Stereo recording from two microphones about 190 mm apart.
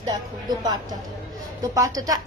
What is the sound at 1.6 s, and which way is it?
Speech, 15° right (ahead or behind).